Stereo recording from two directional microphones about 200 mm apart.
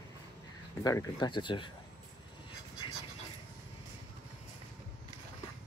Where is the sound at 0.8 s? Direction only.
20° left (ahead or behind).